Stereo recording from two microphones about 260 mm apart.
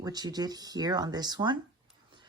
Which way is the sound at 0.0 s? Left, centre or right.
Centre.